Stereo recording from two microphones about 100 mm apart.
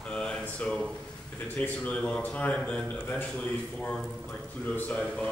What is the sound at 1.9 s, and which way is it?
Speech, 10° left (ahead or behind).